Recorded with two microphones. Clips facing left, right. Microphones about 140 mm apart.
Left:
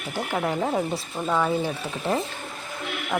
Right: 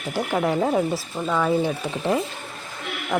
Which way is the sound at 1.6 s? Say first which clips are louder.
Right 4 dB; 20° right (ahead or behind).